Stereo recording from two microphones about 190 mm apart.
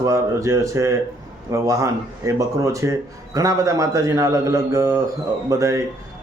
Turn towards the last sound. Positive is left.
turn(degrees=-15)  # may be behind; listen again after turning